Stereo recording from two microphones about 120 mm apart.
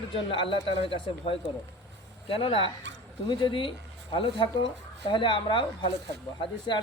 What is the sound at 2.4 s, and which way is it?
Speech, 50° left (ahead or behind).